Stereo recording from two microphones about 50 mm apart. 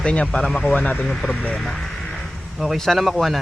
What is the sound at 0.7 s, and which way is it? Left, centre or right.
Speech, left.